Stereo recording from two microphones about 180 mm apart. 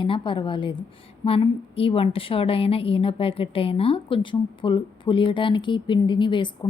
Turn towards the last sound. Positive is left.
turn(degrees=25)  # may be behind; listen again after turning